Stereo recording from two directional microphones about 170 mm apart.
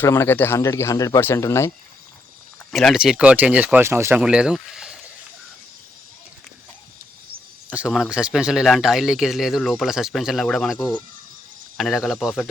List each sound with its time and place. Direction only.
0.0 s speech: 15° left (ahead or behind)
2.7 s speech: centre (ahead or behind)
7.7 s speech: 5° right (ahead or behind)